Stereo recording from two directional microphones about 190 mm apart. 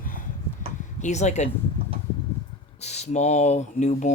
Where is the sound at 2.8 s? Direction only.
35° left (ahead or behind).